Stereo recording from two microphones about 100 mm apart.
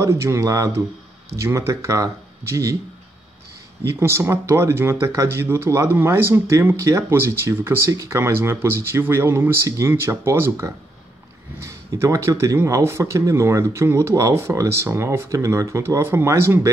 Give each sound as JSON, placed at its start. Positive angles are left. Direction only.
{"t": 0.0, "sound": "speech", "side_deg": -30}
{"t": 3.8, "sound": "speech", "side_deg": -25}